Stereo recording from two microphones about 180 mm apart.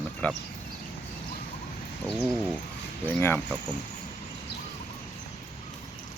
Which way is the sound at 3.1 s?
10° left (ahead or behind).